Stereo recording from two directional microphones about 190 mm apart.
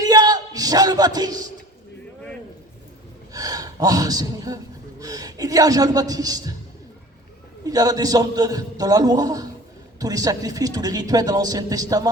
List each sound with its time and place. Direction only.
0.0 s a sound: 20° right (ahead or behind)
3.3 s speech: 20° right (ahead or behind)
7.6 s a man's voice: 20° right (ahead or behind)